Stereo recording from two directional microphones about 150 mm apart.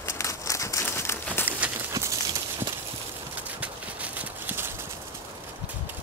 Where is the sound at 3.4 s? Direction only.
10° right (ahead or behind).